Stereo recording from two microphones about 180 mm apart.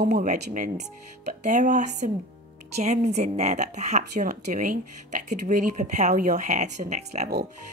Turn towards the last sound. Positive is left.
turn(degrees=-40)  # may be behind; listen again after turning